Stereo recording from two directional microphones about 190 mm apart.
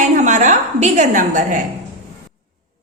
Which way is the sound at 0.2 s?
40° right (ahead or behind).